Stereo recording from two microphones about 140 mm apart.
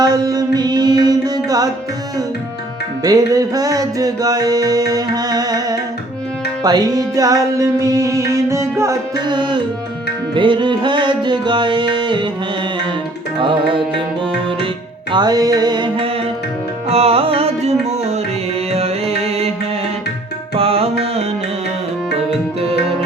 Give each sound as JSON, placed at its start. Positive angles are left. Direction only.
{"t": 0.0, "sound": "music", "side_deg": -30}
{"t": 3.0, "sound": "music", "side_deg": -25}
{"t": 13.4, "sound": "music", "side_deg": -35}
{"t": 15.1, "sound": "music", "side_deg": -30}
{"t": 20.6, "sound": "tabla", "side_deg": -45}